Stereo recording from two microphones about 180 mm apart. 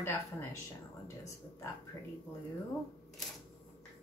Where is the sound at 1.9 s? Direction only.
15° left (ahead or behind).